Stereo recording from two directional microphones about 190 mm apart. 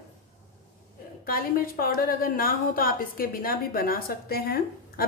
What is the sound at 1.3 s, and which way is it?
A woman's voice, 50° left (ahead or behind).